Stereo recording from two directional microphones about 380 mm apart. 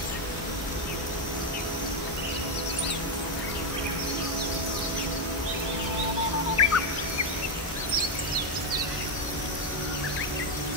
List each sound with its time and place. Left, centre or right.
6.6 s turkey: left